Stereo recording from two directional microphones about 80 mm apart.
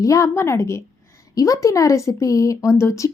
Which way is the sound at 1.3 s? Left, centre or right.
Left.